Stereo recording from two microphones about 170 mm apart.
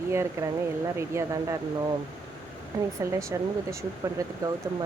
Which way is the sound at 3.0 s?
15° right (ahead or behind).